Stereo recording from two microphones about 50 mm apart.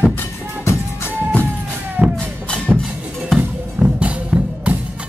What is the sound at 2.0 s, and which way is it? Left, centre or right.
Music, right.